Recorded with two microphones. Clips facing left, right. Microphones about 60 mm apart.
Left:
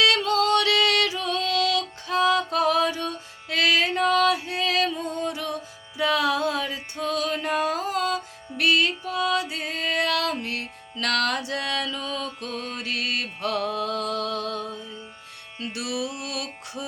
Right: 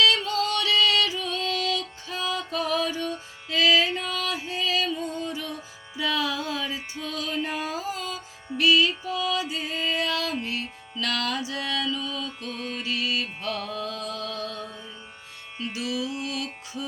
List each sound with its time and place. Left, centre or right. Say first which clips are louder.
0.0 s music: left 2 dB; left
13.7 s a sound: left 5 dB; left
15.7 s music: even; left